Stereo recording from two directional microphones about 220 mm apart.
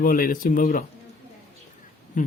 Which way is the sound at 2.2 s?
35° left (ahead or behind).